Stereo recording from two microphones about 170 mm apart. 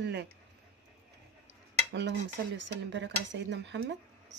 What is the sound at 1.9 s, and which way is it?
Speech, 90° right.